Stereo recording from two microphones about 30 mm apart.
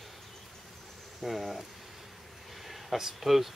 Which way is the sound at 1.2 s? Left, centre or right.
Centre.